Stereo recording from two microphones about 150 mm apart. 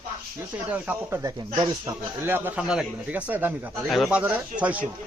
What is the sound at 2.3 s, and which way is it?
Speech, 15° right (ahead or behind).